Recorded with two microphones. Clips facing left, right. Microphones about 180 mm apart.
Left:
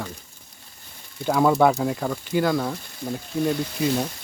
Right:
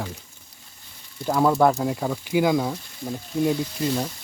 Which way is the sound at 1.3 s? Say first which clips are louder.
Left 1 dB; centre (ahead or behind).